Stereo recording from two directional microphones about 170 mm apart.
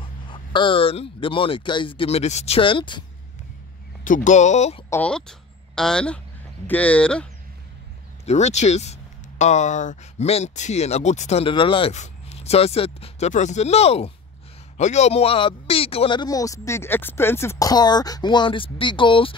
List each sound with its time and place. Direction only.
0.0 s speech: 30° left (ahead or behind)
4.0 s speech: 50° left (ahead or behind)
4.8 s speech: 10° left (ahead or behind)
8.3 s speech: 40° left (ahead or behind)